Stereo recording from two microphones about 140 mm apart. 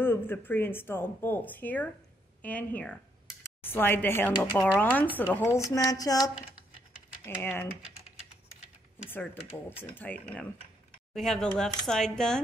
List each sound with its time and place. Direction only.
0.0 s speech: 15° left (ahead or behind)
9.1 s speech: 15° left (ahead or behind)